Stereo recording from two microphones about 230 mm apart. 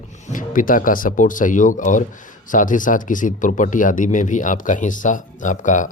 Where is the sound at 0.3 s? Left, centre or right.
Left.